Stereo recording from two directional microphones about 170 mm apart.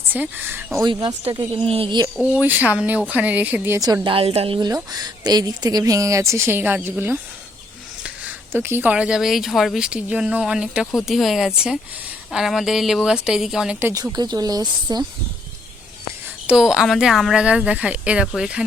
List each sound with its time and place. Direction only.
0.1 s speech: 10° right (ahead or behind)
0.8 s speech: 25° right (ahead or behind)
2.1 s speech: 10° right (ahead or behind)
16.5 s speech: 5° right (ahead or behind)